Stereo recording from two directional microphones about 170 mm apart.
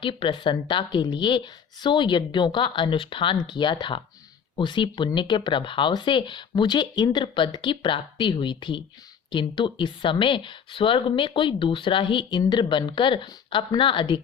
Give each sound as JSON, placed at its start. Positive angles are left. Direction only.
{"t": 0.0, "sound": "speech", "side_deg": 30}